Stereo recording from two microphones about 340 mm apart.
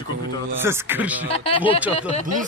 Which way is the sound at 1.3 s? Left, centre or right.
Centre.